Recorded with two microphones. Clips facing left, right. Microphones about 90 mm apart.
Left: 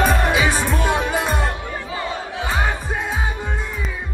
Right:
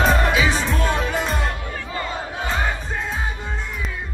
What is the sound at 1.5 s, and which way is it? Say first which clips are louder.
Music: left 2 dB; 15° left (ahead or behind).